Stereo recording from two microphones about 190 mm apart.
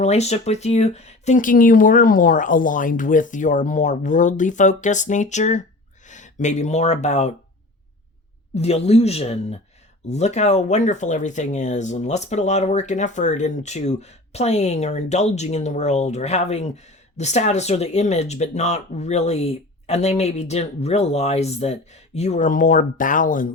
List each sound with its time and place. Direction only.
0.0 s speech: 35° left (ahead or behind)
8.5 s speech: 35° left (ahead or behind)